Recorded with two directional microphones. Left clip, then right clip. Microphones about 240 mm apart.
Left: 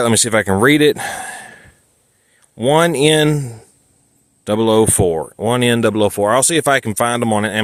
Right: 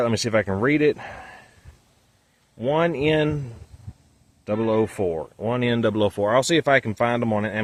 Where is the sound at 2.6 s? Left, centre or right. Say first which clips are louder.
Left 9 dB; left.